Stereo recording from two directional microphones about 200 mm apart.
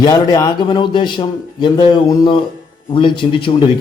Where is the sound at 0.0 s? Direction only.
20° left (ahead or behind).